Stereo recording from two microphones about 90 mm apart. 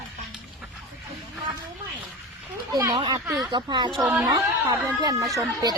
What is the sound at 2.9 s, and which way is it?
Speech, 60° right (ahead or behind).